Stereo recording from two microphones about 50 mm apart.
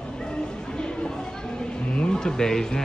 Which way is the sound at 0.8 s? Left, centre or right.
Centre.